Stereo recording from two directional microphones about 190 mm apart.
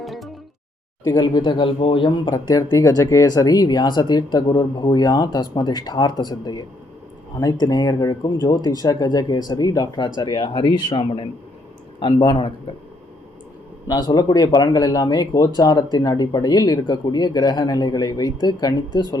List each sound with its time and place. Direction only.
0.0 s music: centre (ahead or behind)
1.0 s speech: 20° left (ahead or behind)
13.8 s speech: 20° left (ahead or behind)